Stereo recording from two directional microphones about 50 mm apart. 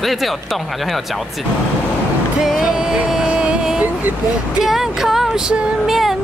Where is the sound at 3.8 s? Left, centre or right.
Right.